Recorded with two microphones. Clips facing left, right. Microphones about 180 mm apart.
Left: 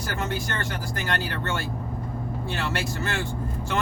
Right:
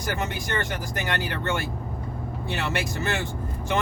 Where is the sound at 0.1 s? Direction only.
20° right (ahead or behind).